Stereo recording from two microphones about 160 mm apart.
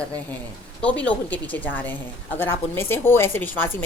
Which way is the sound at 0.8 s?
10° left (ahead or behind).